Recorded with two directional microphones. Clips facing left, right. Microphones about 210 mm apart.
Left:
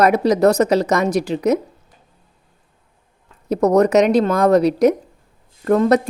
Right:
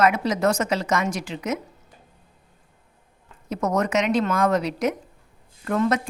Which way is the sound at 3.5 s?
35° left (ahead or behind).